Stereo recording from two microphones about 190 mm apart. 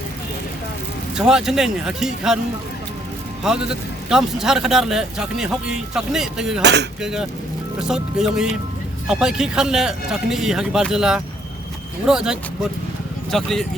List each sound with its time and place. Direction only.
1.1 s a man's voice: 5° right (ahead or behind)
3.4 s a man's voice: 5° right (ahead or behind)
6.6 s speech: 65° right (ahead or behind)
7.0 s a man's voice: 5° right (ahead or behind)